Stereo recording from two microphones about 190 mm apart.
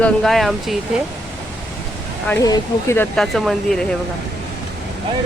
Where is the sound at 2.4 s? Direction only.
15° left (ahead or behind); by 3.9 s centre (ahead or behind).